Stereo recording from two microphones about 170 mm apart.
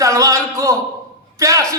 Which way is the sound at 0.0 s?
20° right (ahead or behind).